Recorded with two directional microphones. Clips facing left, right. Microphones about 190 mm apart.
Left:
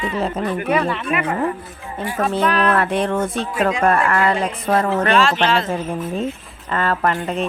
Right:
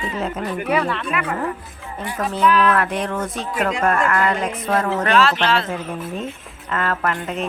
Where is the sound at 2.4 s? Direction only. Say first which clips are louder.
Right 3 dB; 40° left (ahead or behind).